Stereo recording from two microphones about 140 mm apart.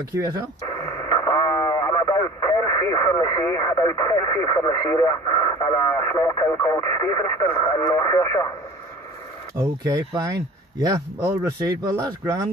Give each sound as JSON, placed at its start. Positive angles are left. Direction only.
{"t": 0.2, "sound": "speech", "side_deg": -25}
{"t": 0.7, "sound": "radio", "side_deg": 25}
{"t": 3.5, "sound": "speech", "side_deg": 25}
{"t": 9.6, "sound": "speech", "side_deg": -25}